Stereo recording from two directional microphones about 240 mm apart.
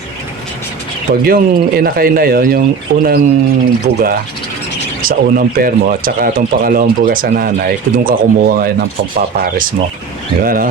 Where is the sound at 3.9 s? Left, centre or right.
Right.